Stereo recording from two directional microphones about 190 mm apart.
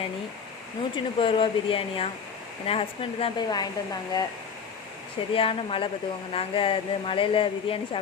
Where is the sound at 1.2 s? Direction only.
30° left (ahead or behind).